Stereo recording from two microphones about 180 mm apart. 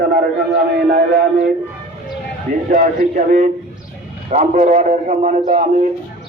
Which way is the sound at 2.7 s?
45° right (ahead or behind).